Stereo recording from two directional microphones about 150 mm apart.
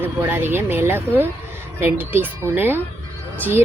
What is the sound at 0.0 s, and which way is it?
A woman's voice, 15° right (ahead or behind).